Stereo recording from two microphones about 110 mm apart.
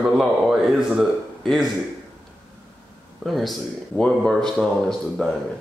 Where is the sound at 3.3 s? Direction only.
Centre (ahead or behind).